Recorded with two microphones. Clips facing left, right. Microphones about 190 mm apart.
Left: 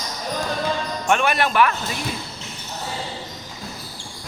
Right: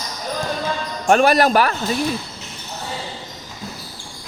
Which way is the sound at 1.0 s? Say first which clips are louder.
Right 7 dB; 40° right (ahead or behind).